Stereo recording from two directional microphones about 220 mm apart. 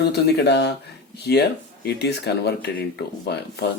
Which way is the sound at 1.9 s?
50° left (ahead or behind).